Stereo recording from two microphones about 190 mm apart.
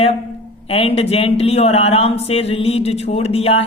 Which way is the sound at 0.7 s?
30° left (ahead or behind).